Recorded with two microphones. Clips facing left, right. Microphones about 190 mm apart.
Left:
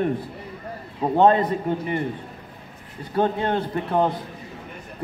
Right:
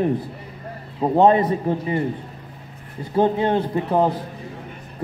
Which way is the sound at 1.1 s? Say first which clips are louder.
Right 2 dB; 10° right (ahead or behind).